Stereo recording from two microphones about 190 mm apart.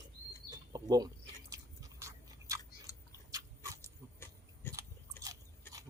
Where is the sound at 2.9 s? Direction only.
15° left (ahead or behind).